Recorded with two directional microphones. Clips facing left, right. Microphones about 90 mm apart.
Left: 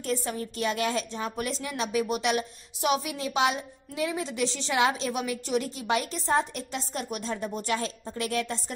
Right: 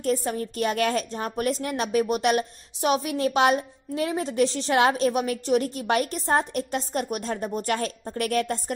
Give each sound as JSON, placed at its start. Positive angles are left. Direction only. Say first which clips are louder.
{"t": 0.0, "sound": "a woman's voice", "louder": "right 5 dB", "side_deg": -40}